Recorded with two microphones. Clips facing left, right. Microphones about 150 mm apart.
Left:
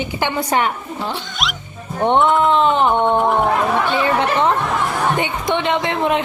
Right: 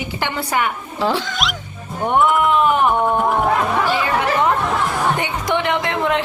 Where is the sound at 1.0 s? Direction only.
90° right.